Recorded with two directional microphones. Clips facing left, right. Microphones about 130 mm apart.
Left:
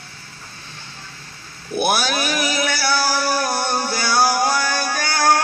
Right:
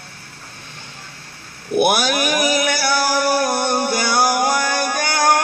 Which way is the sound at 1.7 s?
15° right (ahead or behind).